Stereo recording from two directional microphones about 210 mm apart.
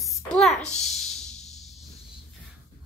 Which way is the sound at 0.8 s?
Centre (ahead or behind).